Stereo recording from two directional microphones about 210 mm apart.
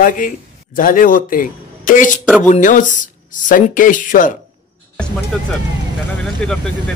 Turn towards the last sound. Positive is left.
turn(degrees=5)  # may be behind; listen again after turning